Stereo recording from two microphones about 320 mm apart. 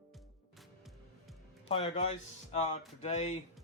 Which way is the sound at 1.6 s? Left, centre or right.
Centre.